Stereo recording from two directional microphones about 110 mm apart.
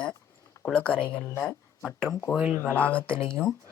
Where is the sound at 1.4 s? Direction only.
5° left (ahead or behind).